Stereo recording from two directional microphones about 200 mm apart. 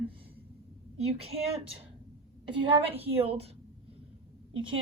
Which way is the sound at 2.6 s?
25° right (ahead or behind).